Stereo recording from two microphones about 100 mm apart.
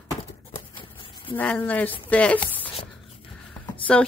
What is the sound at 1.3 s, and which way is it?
A woman's voice, 15° left (ahead or behind).